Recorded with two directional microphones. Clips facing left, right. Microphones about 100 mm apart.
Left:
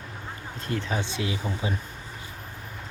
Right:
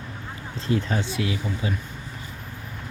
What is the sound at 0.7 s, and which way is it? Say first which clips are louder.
Speech: right 6 dB; 85° right.